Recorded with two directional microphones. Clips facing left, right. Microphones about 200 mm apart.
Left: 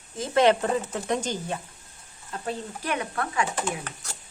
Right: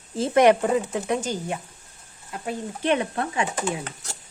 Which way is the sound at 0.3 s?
10° right (ahead or behind).